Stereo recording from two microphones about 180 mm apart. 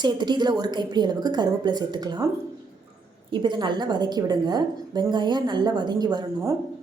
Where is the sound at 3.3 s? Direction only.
25° right (ahead or behind).